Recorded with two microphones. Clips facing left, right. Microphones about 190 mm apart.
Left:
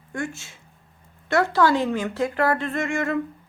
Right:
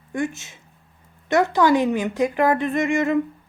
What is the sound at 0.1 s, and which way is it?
Speech, 20° right (ahead or behind).